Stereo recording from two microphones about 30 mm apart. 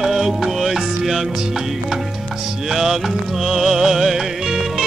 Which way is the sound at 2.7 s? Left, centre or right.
Centre.